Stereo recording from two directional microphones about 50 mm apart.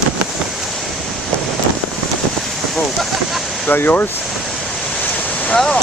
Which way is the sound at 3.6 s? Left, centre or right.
Left.